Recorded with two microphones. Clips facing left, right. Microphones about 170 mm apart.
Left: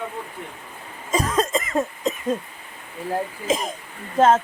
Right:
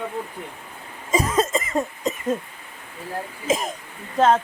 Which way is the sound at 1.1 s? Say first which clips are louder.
Right 1 dB; 10° right (ahead or behind).